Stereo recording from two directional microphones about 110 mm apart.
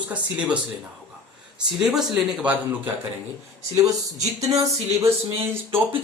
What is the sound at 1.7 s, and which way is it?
Speech, 5° right (ahead or behind).